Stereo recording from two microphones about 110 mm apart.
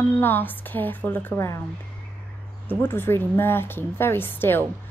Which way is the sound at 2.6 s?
20° left (ahead or behind).